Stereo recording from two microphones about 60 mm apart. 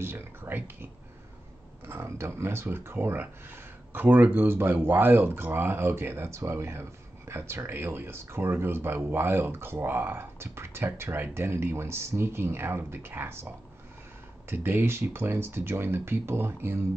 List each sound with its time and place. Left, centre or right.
0.0 s speech: right
1.9 s speech: right
14.5 s speech: right